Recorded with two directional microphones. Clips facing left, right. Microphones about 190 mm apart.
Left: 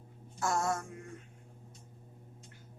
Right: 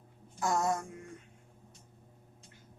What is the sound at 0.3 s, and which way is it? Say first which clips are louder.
Mantra: right 2 dB; 15° right (ahead or behind).